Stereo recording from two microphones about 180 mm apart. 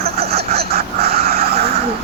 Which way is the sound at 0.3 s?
60° right (ahead or behind).